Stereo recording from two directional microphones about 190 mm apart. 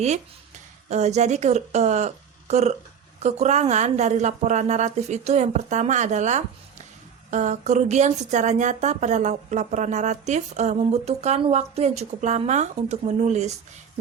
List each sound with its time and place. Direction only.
0.9 s a woman's voice: 35° right (ahead or behind)